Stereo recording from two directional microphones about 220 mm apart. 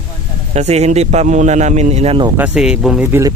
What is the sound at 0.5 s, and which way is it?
A man's voice, 30° right (ahead or behind).